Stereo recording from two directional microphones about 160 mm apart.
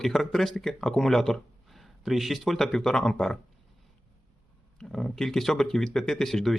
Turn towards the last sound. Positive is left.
turn(degrees=0)  # may be behind; listen again after turning